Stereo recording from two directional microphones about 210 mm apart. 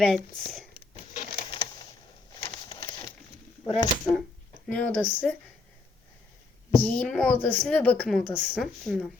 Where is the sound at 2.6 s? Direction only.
25° left (ahead or behind).